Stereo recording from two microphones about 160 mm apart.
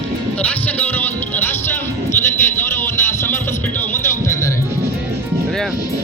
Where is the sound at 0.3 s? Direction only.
10° left (ahead or behind).